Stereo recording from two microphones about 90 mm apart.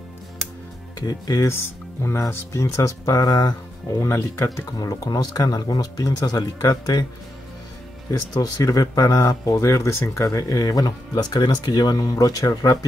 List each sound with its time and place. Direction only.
0.9 s speech: 45° left (ahead or behind)
4.0 s speech: 35° left (ahead or behind)
4.7 s speech: 45° left (ahead or behind)
8.1 s speech: 40° left (ahead or behind)